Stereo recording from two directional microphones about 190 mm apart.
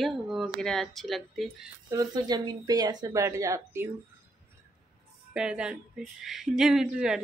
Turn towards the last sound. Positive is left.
turn(degrees=-5)  # may be behind; listen again after turning